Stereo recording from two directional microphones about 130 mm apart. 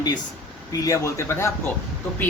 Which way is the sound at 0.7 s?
25° left (ahead or behind).